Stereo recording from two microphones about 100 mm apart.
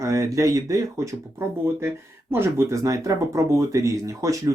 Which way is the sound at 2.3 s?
30° right (ahead or behind).